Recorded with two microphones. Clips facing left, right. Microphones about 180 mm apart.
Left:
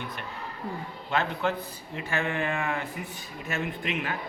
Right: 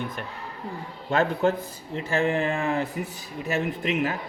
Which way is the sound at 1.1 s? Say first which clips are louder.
Right 6 dB; 45° right (ahead or behind).